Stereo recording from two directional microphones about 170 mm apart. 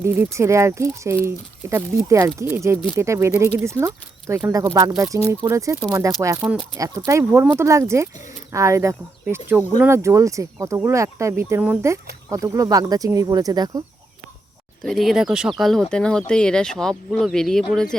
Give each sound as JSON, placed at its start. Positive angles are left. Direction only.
{"t": 0.0, "sound": "speech", "side_deg": -15}
{"t": 14.8, "sound": "speech", "side_deg": 0}